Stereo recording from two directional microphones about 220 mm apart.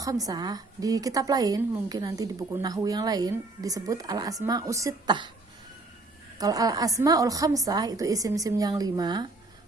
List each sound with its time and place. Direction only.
0.0 s a woman's voice: 15° right (ahead or behind)
6.4 s a woman's voice: 15° right (ahead or behind)